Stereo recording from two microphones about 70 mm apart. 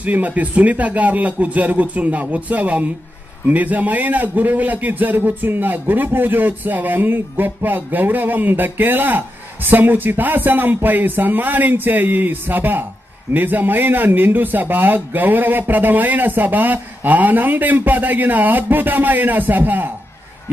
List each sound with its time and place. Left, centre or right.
0.0 s a man's voice: right